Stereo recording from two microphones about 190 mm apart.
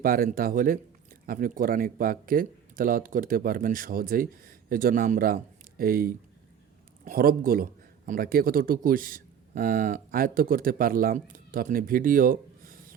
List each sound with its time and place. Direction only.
0.0 s a man's voice: 50° right (ahead or behind)